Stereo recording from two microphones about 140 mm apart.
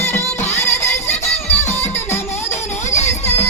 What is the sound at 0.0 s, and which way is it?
Music, 15° left (ahead or behind).